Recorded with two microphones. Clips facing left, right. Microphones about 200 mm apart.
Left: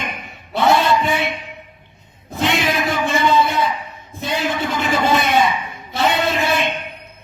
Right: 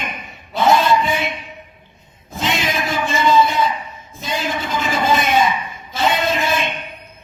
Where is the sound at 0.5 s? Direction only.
65° left (ahead or behind).